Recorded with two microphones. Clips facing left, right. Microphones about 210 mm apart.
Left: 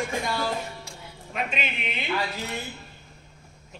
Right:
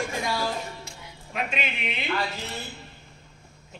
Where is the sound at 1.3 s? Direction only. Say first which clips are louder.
Even; centre (ahead or behind).